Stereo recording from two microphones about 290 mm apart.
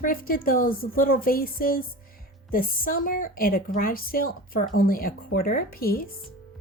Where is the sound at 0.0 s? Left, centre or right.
Left.